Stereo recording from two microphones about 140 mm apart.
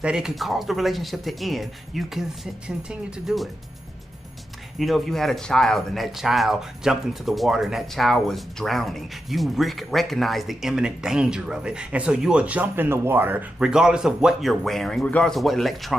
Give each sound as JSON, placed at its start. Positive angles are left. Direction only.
{"t": 0.0, "sound": "speech", "side_deg": -5}
{"t": 4.7, "sound": "speech", "side_deg": 0}